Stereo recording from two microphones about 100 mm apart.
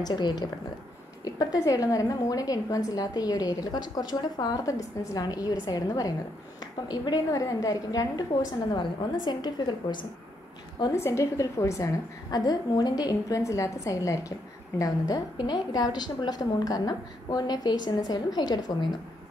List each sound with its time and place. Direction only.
0.0 s a woman's voice: 45° left (ahead or behind)
11.0 s a woman's voice: 30° left (ahead or behind)
15.3 s a woman's voice: 50° left (ahead or behind)